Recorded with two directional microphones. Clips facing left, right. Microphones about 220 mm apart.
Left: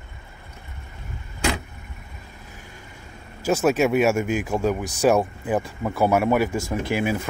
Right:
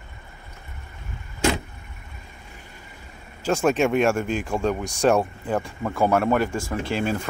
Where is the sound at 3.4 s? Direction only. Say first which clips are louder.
Left 1 dB; 5° left (ahead or behind).